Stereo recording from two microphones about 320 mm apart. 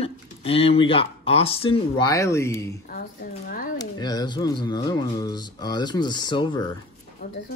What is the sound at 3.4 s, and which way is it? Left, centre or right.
Speech, left.